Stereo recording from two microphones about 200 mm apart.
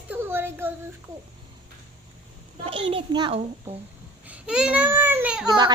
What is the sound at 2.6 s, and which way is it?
Speech, 25° right (ahead or behind).